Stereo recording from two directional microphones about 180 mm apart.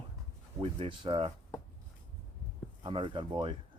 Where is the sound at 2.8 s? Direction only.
25° right (ahead or behind).